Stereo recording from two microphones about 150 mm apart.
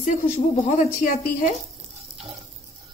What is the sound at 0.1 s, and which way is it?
A woman's voice, 50° left (ahead or behind).